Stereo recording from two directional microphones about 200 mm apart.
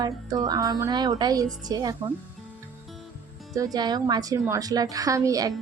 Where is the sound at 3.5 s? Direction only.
20° right (ahead or behind).